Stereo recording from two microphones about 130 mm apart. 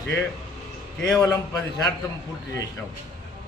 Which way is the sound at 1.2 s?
25° left (ahead or behind).